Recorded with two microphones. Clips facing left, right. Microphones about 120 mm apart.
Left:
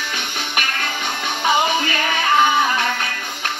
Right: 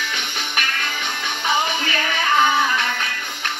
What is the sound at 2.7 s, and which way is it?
Music, 40° left (ahead or behind).